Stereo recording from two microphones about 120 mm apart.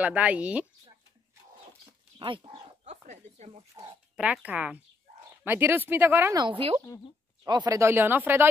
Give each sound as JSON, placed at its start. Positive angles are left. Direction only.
{"t": 0.0, "sound": "speech", "side_deg": -10}
{"t": 2.1, "sound": "speech", "side_deg": -45}
{"t": 2.8, "sound": "speech", "side_deg": -75}
{"t": 4.2, "sound": "speech", "side_deg": -10}
{"t": 6.3, "sound": "a woman's voice", "side_deg": -45}
{"t": 7.4, "sound": "speech", "side_deg": -35}